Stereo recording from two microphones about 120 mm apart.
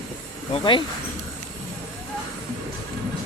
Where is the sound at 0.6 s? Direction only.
40° left (ahead or behind).